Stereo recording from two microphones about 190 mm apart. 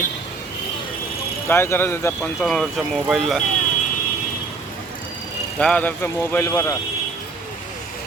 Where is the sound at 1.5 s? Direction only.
10° left (ahead or behind).